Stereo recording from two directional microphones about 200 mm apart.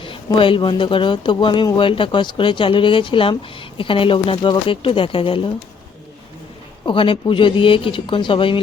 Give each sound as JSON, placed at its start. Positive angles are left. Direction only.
{"t": 0.0, "sound": "speech", "side_deg": 25}
{"t": 6.8, "sound": "speech", "side_deg": 25}